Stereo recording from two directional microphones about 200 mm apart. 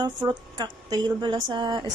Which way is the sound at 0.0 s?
20° right (ahead or behind).